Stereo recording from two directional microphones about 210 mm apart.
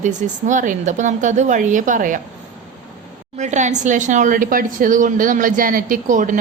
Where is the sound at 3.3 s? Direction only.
35° right (ahead or behind).